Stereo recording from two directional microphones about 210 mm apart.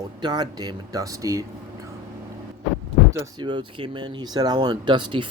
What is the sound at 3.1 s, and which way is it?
Speech, 20° right (ahead or behind).